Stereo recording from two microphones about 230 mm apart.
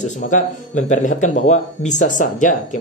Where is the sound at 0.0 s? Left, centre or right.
Left.